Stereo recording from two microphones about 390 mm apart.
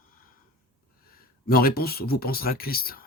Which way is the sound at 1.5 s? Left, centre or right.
Left.